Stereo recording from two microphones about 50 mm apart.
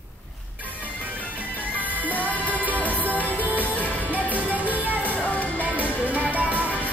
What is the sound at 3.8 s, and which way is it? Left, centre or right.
Music, left.